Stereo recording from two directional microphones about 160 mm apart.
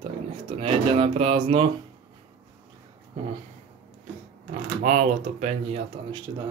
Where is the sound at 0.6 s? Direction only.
35° right (ahead or behind).